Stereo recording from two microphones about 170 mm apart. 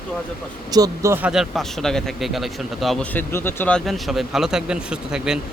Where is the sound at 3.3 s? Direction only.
15° left (ahead or behind); by 5.4 s 5° right (ahead or behind).